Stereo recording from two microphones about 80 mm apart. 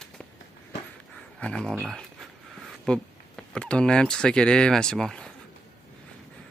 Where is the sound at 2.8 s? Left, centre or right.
Centre.